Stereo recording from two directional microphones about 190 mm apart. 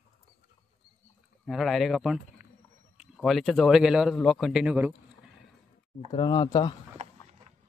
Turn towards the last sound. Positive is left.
turn(degrees=-40)  # may be behind; listen again after turning